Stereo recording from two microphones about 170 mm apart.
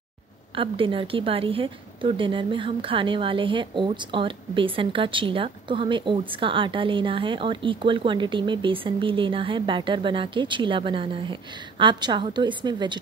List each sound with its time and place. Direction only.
0.6 s a woman's voice: 30° right (ahead or behind)